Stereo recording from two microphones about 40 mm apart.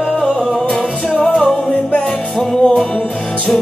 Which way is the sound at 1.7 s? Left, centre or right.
Left.